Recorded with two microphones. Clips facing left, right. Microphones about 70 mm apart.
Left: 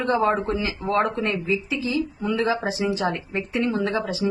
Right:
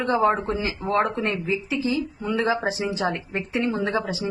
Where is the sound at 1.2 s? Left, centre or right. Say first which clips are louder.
Left 1 dB; right.